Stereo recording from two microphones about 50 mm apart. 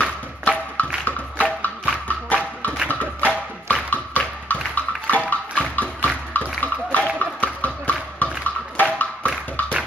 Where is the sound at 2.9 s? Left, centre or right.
Left.